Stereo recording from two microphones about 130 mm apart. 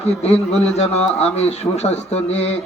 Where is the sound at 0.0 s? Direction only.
55° left (ahead or behind).